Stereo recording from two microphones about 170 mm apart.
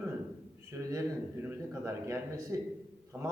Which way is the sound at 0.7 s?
15° right (ahead or behind).